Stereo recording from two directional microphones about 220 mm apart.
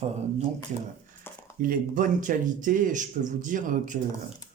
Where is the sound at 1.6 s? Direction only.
40° right (ahead or behind).